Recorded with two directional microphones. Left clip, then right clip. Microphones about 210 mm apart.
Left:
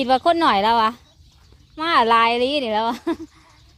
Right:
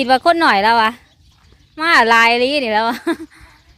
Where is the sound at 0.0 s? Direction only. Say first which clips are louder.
Right 4 dB; 15° right (ahead or behind).